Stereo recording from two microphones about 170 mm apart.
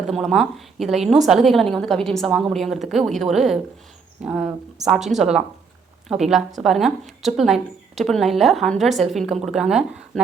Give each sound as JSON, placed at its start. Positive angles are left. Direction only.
{"t": 0.1, "sound": "a woman's voice", "side_deg": 0}